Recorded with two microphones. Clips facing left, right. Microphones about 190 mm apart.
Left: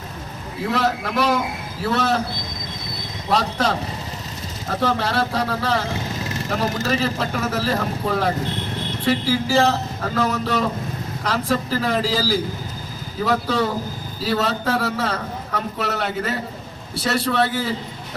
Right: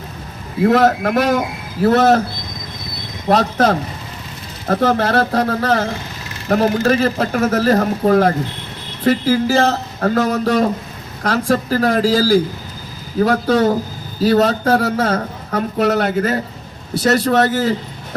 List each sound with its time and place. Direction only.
0.7 s a man's voice: 45° right (ahead or behind)
3.2 s a man's voice: 50° right (ahead or behind)